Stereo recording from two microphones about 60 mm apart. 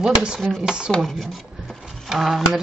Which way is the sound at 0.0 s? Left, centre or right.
Centre.